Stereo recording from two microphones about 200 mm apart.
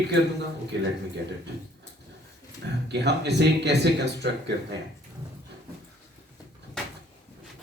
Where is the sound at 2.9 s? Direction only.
55° right (ahead or behind).